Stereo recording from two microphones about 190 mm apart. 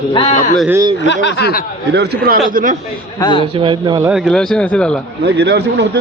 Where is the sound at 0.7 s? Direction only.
20° right (ahead or behind).